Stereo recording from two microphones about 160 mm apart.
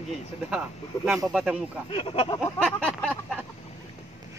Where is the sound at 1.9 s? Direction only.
35° left (ahead or behind).